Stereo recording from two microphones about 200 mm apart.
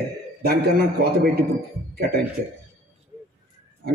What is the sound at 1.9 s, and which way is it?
Speech, 50° right (ahead or behind).